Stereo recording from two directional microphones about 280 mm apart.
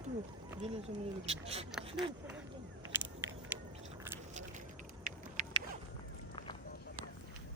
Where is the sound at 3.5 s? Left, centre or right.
Centre.